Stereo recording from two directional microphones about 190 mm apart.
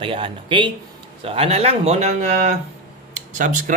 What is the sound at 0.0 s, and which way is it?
A man's voice, 30° right (ahead or behind).